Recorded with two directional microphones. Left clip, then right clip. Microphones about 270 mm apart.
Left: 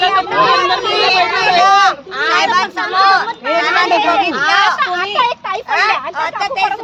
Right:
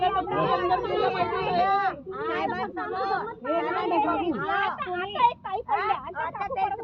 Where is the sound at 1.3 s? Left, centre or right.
Left.